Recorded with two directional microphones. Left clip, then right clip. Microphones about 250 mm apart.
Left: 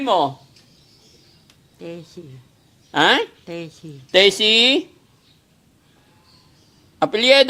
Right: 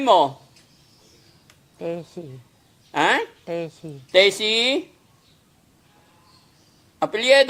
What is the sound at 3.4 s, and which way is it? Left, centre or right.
Speech, centre.